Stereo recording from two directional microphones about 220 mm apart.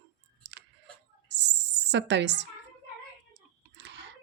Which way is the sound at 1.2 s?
50° right (ahead or behind).